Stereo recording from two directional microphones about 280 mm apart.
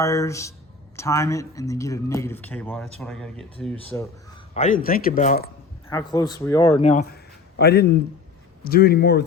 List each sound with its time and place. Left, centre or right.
0.0 s speech: centre
4.5 s speech: left
5.9 s speech: centre
7.1 s a sound: left
8.6 s speech: left